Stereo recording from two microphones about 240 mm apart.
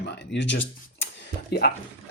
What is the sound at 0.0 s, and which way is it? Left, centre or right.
A woman's voice, left.